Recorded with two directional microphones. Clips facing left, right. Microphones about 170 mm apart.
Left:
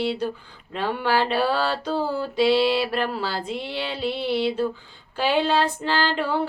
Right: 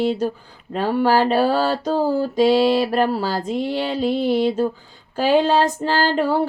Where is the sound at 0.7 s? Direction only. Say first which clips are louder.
Right 6 dB; 40° right (ahead or behind).